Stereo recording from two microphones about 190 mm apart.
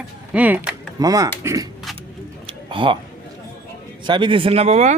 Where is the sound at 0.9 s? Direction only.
20° right (ahead or behind).